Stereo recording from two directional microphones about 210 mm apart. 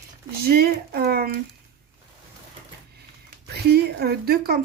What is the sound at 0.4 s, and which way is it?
Speech, 45° right (ahead or behind).